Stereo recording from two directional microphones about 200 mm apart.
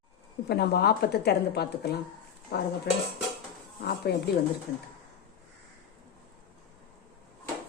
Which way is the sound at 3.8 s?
55° left (ahead or behind).